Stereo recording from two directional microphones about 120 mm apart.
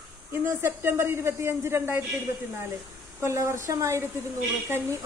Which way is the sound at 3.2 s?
25° right (ahead or behind).